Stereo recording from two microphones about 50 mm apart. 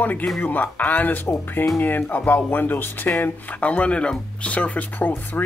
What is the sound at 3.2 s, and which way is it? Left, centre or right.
Speech, left.